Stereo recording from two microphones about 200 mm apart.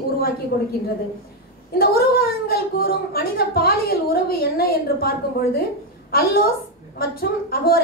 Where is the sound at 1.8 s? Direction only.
50° left (ahead or behind).